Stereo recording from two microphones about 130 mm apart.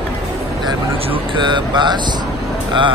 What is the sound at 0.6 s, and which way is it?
Speech, 40° right (ahead or behind).